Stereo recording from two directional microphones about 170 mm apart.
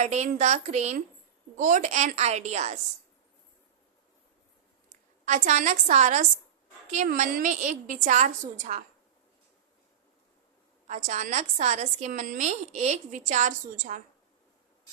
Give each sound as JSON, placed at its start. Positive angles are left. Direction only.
{"t": 0.0, "sound": "a woman's voice", "side_deg": -40}
{"t": 4.9, "sound": "a woman's voice", "side_deg": -45}
{"t": 10.8, "sound": "a woman's voice", "side_deg": -45}